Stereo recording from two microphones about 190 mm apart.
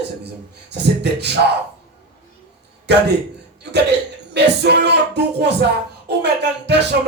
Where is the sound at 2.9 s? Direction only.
60° right (ahead or behind).